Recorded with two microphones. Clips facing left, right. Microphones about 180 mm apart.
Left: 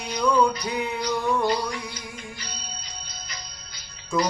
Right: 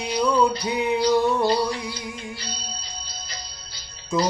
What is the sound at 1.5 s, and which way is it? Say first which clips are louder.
Music: right 4 dB; 30° right (ahead or behind).